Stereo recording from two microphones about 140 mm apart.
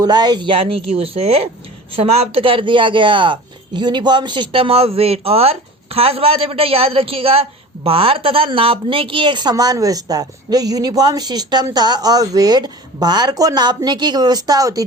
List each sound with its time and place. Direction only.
0.0 s a woman's voice: 30° right (ahead or behind)